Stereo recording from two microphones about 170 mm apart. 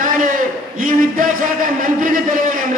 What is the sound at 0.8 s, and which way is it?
A man's voice, 55° right (ahead or behind).